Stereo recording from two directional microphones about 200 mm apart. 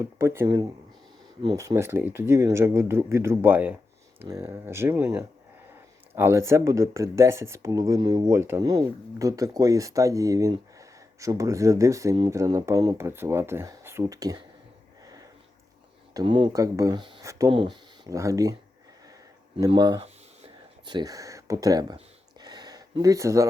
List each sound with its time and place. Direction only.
0.0 s speech: 15° right (ahead or behind)
16.1 s speech: 25° right (ahead or behind)
19.5 s speech: 20° right (ahead or behind)
21.9 s a sound: 20° right (ahead or behind)